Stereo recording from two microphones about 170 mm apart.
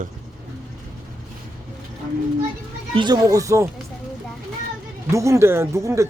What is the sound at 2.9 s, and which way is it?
Speech, 25° right (ahead or behind).